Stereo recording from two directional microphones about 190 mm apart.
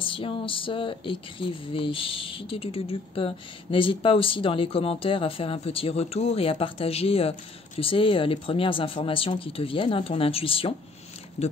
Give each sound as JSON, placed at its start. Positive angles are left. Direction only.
{"t": 0.0, "sound": "speech", "side_deg": 25}